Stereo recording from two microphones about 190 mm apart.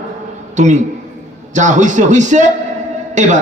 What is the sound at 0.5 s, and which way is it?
A man's voice, 40° right (ahead or behind).